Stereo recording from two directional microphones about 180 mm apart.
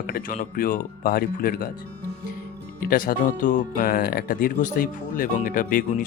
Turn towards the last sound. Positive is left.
turn(degrees=50)  # may be behind; listen again after turning